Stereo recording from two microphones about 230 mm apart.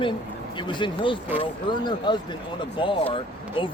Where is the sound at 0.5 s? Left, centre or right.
Left.